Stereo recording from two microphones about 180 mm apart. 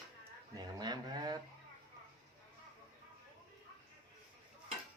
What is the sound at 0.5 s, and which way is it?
Livestock, 20° right (ahead or behind).